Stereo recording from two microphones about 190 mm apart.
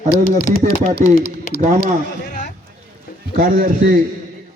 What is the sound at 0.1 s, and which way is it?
Speech, 50° left (ahead or behind).